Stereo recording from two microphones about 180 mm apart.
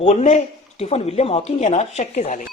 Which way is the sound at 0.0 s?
35° left (ahead or behind).